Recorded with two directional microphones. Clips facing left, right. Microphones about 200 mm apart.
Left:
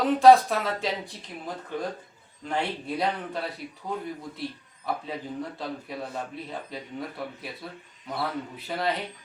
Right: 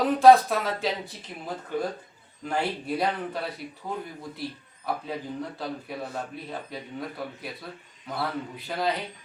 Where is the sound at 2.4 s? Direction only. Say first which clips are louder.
Right 1 dB; 5° right (ahead or behind).